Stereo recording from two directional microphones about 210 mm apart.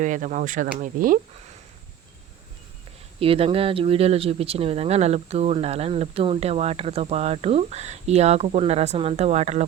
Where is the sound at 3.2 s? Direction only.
25° right (ahead or behind).